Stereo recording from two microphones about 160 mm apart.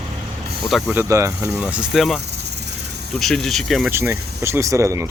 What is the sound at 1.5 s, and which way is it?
Speech, 5° right (ahead or behind).